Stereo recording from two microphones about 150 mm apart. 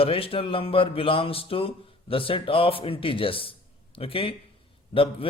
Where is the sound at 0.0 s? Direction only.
40° left (ahead or behind).